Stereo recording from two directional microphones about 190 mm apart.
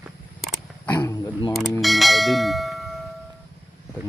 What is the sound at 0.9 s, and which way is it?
Speech, 20° left (ahead or behind).